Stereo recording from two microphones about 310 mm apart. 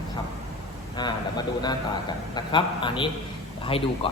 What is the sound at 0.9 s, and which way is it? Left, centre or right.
A man's voice, centre.